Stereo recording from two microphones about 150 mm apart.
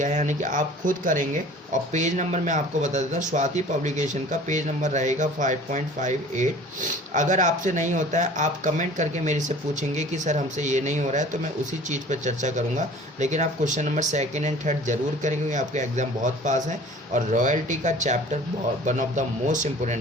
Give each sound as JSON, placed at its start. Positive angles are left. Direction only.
{"t": 0.0, "sound": "speech", "side_deg": -55}